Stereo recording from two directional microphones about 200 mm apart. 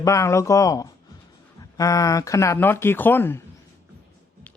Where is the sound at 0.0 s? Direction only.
15° left (ahead or behind).